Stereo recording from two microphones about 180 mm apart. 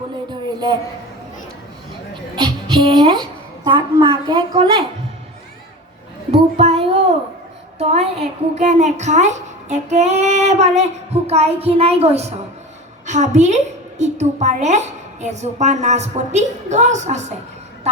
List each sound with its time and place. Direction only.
0.3 s a sound: 25° right (ahead or behind)
2.3 s a woman's voice: 25° right (ahead or behind)
6.6 s child singing: 35° right (ahead or behind)
7.8 s a woman's voice: 35° right (ahead or behind)